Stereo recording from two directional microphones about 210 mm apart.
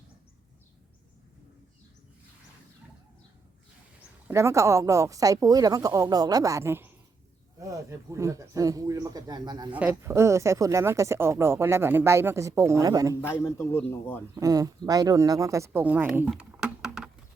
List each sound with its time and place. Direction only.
4.3 s speech: 15° right (ahead or behind)
9.7 s speech: 10° right (ahead or behind)
13.2 s a man's voice: 10° left (ahead or behind)
14.3 s speech: 15° right (ahead or behind)